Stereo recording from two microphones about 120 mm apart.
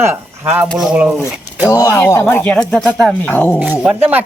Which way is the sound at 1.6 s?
25° left (ahead or behind).